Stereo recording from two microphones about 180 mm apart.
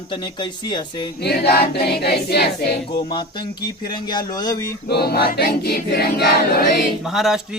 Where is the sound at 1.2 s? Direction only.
60° left (ahead or behind).